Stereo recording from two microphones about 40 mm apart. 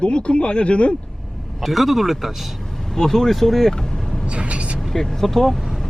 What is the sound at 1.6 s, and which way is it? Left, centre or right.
Speech, centre.